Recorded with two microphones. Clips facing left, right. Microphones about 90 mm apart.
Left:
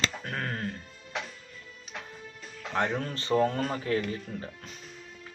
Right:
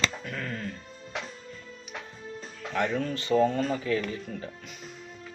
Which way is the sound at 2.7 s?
35° left (ahead or behind).